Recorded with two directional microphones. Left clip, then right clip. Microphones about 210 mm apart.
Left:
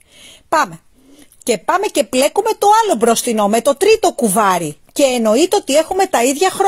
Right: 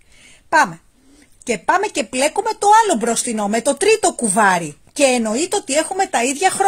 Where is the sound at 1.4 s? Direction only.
35° left (ahead or behind).